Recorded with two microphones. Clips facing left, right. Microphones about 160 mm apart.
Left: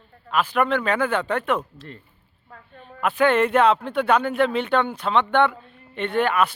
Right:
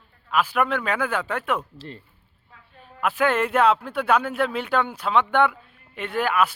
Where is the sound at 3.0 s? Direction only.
5° right (ahead or behind).